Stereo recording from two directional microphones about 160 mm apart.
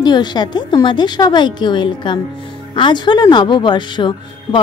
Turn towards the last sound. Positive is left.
turn(degrees=30)  # may be behind; listen again after turning